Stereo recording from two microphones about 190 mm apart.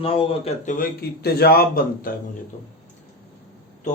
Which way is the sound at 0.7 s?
50° left (ahead or behind).